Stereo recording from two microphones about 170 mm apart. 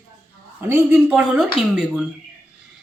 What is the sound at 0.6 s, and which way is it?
Speech, 10° right (ahead or behind).